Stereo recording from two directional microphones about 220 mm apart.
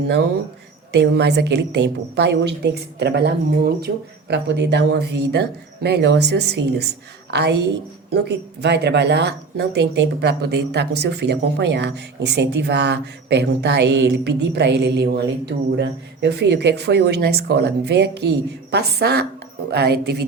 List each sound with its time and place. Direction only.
0.9 s a woman's voice: 50° right (ahead or behind)